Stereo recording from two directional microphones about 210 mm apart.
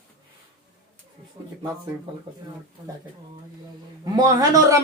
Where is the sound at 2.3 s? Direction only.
25° right (ahead or behind).